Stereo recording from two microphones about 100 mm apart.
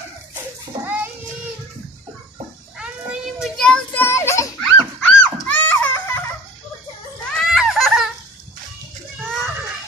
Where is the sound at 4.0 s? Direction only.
25° left (ahead or behind).